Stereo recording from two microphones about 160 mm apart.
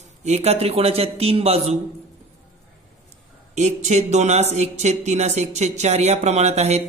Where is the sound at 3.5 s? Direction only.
45° right (ahead or behind).